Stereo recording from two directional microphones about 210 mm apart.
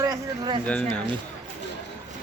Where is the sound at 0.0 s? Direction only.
20° right (ahead or behind).